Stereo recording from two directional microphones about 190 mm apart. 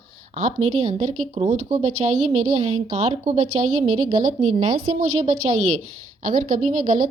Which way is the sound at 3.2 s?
40° right (ahead or behind).